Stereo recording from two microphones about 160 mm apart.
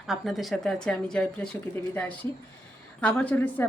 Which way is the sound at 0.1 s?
Centre (ahead or behind).